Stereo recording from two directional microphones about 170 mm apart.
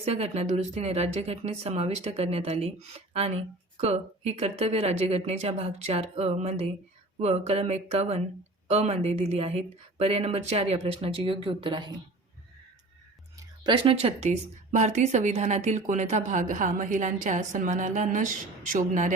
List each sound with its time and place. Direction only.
0.0 s speech: 40° right (ahead or behind)
13.3 s speech: 30° right (ahead or behind); by 19.1 s 50° right (ahead or behind)